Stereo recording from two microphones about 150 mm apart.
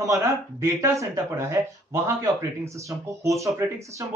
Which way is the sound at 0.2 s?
20° right (ahead or behind).